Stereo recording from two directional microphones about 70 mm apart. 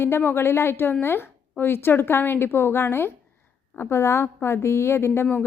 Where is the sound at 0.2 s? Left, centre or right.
Left.